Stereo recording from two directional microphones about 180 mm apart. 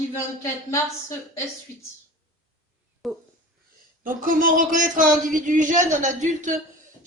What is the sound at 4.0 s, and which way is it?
Speech, 50° right (ahead or behind).